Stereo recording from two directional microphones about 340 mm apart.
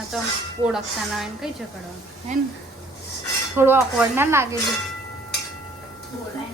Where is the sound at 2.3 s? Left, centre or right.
Right.